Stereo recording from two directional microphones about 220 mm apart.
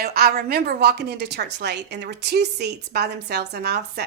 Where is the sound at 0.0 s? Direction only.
45° right (ahead or behind).